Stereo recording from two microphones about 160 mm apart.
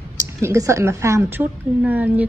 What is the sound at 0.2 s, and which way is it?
A woman's voice, 20° right (ahead or behind).